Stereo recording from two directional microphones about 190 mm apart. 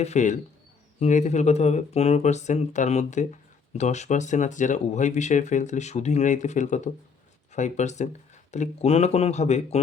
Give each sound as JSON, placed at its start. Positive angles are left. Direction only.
{"t": 0.0, "sound": "speech", "side_deg": 40}